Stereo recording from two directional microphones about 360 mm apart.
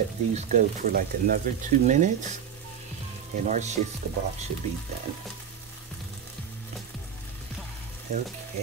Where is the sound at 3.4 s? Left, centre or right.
Centre.